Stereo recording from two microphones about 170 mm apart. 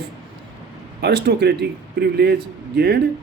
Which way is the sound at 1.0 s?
80° right.